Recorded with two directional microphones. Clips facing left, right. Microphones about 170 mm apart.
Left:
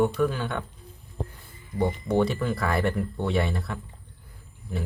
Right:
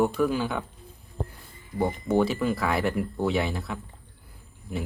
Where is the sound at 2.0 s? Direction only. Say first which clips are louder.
Right 2 dB; 5° right (ahead or behind).